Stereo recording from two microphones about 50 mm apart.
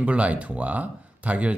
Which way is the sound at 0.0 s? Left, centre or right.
Right.